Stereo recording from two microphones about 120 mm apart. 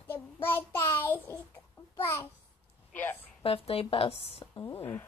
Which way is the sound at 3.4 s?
50° left (ahead or behind).